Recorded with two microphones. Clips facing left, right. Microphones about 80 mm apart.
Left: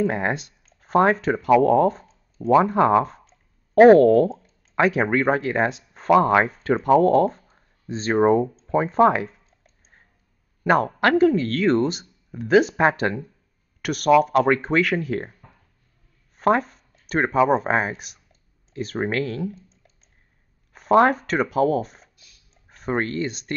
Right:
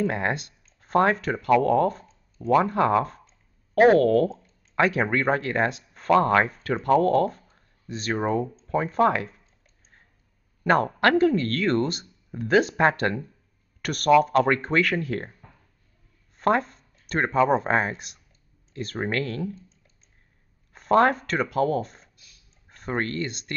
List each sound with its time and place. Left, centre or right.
0.0 s speech: centre
5.7 s speech: left
7.5 s a sound: left
8.6 s speech: centre
10.6 s speech: centre
20.7 s speech: centre